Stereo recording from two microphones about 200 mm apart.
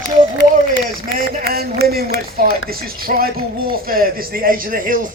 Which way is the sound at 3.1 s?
45° right (ahead or behind).